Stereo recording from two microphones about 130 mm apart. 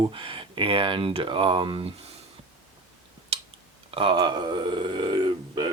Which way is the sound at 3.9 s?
40° right (ahead or behind).